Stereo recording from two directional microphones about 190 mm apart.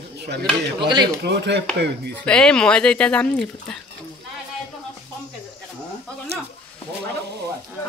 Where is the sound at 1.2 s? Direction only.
65° right (ahead or behind).